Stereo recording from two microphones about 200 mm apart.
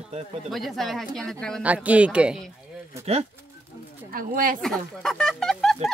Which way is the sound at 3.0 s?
30° right (ahead or behind).